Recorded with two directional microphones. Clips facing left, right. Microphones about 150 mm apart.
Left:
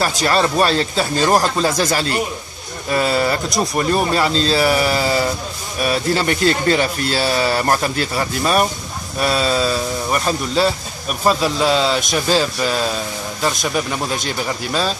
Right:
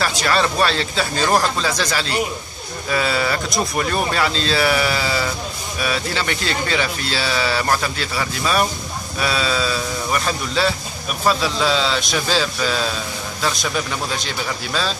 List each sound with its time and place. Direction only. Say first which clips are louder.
0.0 s speech: left 2 dB; 40° left (ahead or behind)
3.4 s speech: left 3 dB; centre (ahead or behind)
4.2 s speech: left 3 dB; 35° left (ahead or behind)
11.6 s speech: left 3 dB; 5° left (ahead or behind)